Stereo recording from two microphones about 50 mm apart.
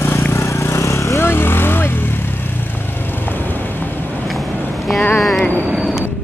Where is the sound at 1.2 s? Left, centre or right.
Left.